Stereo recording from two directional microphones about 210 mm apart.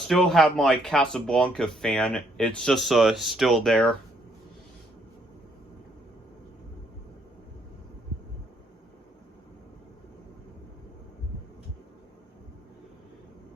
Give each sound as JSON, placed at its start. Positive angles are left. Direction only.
{"t": 0.1, "sound": "speech", "side_deg": 0}